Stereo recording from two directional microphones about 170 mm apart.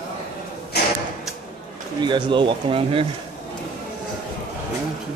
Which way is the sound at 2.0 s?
25° right (ahead or behind).